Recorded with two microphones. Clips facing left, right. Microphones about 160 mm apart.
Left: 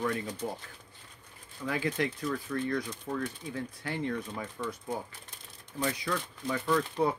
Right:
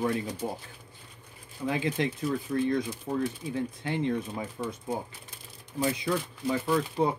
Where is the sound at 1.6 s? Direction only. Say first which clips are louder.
Right 3 dB; 25° right (ahead or behind).